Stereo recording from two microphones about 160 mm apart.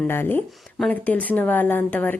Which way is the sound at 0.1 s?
15° left (ahead or behind).